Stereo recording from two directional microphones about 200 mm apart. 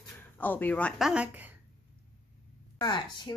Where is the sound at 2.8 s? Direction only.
20° left (ahead or behind).